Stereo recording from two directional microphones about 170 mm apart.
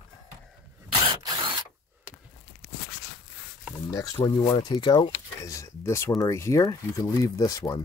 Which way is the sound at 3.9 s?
20° left (ahead or behind).